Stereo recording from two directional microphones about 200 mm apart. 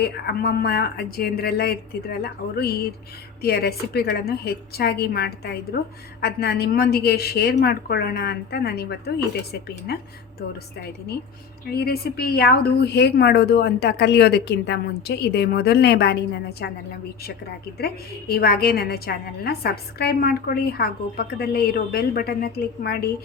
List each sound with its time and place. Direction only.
0.0 s a woman's voice: 50° left (ahead or behind)
11.7 s a woman's voice: 50° left (ahead or behind)
17.7 s a woman's voice: 50° left (ahead or behind)